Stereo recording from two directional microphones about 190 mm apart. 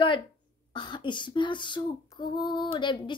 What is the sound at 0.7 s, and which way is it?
A woman's voice, 25° left (ahead or behind).